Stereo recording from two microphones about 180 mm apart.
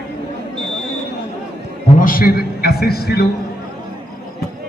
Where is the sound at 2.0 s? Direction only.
50° left (ahead or behind).